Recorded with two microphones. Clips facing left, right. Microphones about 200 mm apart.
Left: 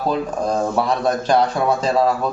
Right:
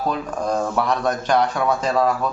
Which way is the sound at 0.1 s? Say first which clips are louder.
Left 4 dB; 30° left (ahead or behind).